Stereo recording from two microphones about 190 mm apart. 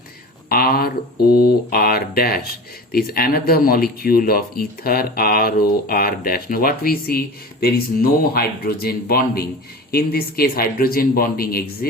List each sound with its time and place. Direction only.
0.4 s speech: 50° left (ahead or behind)